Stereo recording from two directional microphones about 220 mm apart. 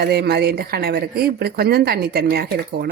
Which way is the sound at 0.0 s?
45° right (ahead or behind).